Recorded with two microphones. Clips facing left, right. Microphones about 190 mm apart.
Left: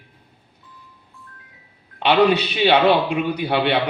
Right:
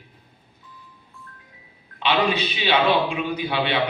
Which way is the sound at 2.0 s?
65° left (ahead or behind).